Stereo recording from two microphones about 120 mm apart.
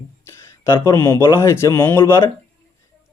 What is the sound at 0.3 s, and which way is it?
Speech, 25° left (ahead or behind).